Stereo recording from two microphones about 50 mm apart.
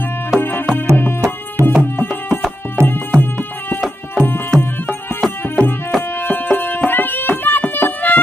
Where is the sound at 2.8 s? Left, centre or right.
Right.